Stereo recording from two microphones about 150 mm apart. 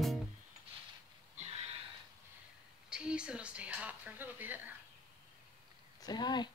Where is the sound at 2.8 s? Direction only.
5° right (ahead or behind).